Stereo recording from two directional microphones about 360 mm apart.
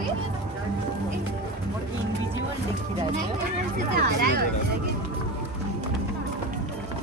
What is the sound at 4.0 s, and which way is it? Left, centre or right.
Speech, right.